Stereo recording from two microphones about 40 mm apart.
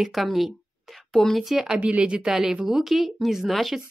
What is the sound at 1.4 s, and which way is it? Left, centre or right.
Speech, centre.